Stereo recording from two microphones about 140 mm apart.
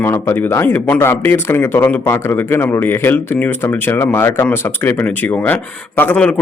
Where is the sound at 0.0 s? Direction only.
15° left (ahead or behind).